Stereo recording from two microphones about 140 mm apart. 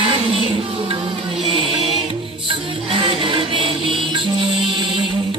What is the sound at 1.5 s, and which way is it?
Music, 40° right (ahead or behind).